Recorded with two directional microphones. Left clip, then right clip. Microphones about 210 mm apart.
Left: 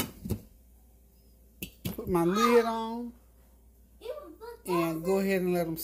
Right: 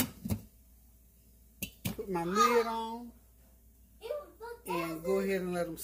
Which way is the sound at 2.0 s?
50° left (ahead or behind).